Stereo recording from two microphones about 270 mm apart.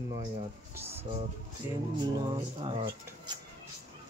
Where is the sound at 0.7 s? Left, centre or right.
Centre.